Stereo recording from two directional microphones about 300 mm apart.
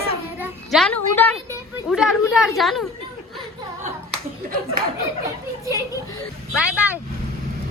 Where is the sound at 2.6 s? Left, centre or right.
Centre.